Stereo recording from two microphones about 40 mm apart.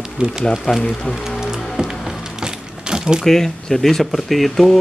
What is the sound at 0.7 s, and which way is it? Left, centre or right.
Speech, left.